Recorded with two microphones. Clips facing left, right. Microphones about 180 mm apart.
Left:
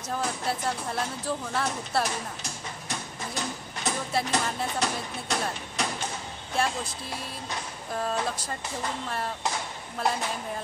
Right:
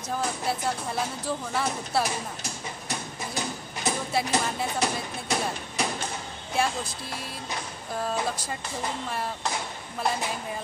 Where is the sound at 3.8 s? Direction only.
5° right (ahead or behind).